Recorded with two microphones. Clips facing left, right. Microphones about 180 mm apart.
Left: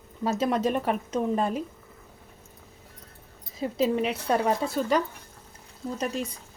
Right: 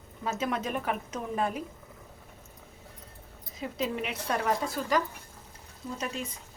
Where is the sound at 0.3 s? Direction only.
35° left (ahead or behind).